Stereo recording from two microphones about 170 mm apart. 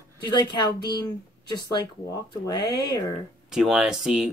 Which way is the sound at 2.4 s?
25° left (ahead or behind).